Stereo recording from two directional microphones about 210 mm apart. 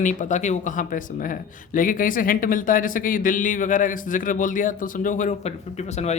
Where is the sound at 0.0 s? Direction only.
35° left (ahead or behind).